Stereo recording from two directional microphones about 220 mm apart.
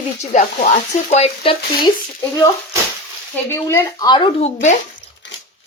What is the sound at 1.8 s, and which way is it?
A woman's voice, 15° left (ahead or behind).